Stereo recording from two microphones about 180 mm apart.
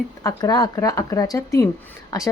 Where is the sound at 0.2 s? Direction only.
20° left (ahead or behind).